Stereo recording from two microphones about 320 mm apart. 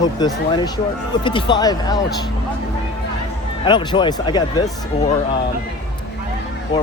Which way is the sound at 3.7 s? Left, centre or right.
Centre.